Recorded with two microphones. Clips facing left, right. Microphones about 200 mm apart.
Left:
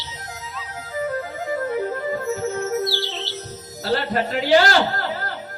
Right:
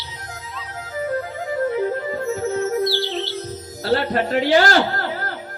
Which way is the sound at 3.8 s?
40° right (ahead or behind).